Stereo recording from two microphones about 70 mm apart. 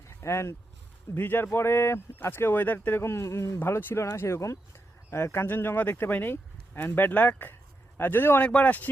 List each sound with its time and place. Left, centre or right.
0.2 s speech: left
1.1 s speech: left
3.9 s speech: left
8.4 s speech: centre